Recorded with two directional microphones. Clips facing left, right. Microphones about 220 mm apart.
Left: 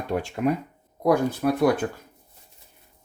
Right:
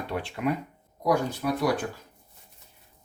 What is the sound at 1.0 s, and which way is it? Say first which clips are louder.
Speech: left 5 dB; 55° left (ahead or behind).